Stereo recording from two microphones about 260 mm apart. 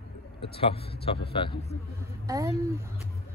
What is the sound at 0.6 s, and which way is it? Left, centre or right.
A man's voice, left.